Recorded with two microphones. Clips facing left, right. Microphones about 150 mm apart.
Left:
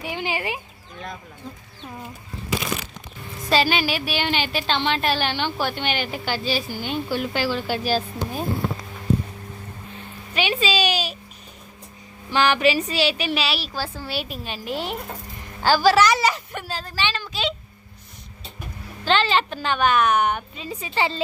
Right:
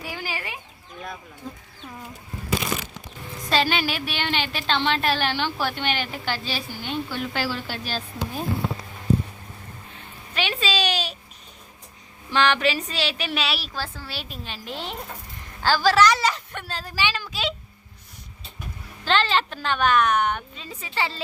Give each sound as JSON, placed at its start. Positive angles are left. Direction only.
{"t": 0.0, "sound": "speech", "side_deg": 20}
{"t": 0.9, "sound": "a woman's voice", "side_deg": -5}
{"t": 3.5, "sound": "a woman's voice", "side_deg": 5}
{"t": 10.3, "sound": "speech", "side_deg": 5}
{"t": 12.3, "sound": "a woman's voice", "side_deg": 5}
{"t": 16.8, "sound": "a woman's voice", "side_deg": -10}
{"t": 19.0, "sound": "a woman's voice", "side_deg": 0}